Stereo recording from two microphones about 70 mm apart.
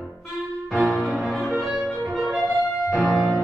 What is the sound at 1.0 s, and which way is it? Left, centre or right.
Music, centre.